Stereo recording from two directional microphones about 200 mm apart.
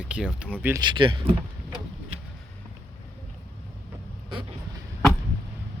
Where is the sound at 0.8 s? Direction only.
25° right (ahead or behind).